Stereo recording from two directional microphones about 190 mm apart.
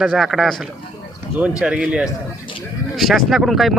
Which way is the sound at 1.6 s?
5° right (ahead or behind).